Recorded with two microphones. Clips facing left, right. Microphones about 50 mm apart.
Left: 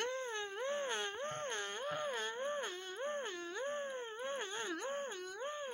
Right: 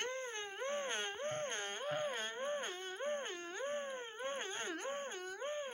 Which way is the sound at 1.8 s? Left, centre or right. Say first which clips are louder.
Right 2 dB; right.